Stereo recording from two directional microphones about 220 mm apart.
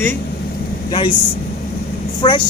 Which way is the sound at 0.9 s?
25° left (ahead or behind).